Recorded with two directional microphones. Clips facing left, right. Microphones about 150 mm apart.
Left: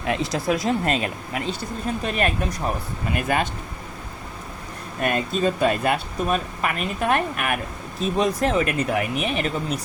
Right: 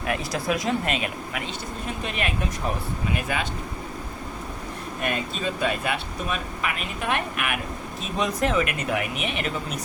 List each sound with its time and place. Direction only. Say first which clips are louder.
0.0 s speech: left 3 dB; 25° left (ahead or behind); by 3.5 s 50° left (ahead or behind)
5.0 s speech: left 6 dB; 45° left (ahead or behind)